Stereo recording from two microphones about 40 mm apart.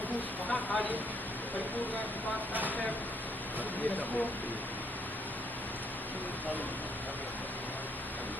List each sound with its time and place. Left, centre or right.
0.4 s speech: left